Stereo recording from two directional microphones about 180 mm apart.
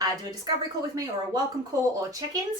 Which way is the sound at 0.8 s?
20° right (ahead or behind).